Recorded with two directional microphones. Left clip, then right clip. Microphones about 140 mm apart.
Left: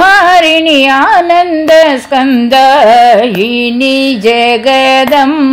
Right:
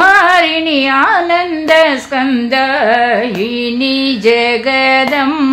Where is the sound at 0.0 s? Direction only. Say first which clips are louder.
Left 3 dB; 35° left (ahead or behind).